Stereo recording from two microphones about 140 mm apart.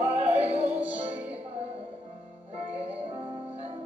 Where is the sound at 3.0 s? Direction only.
35° right (ahead or behind).